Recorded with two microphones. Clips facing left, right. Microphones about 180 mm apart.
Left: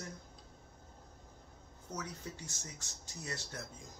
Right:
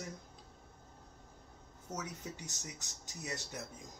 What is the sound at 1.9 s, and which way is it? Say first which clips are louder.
Speech: right 1 dB; 20° right (ahead or behind).